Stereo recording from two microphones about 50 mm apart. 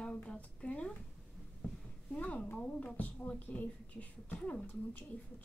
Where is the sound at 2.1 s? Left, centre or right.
Left.